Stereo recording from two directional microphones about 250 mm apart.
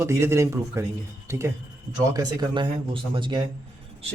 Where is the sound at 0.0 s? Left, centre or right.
Centre.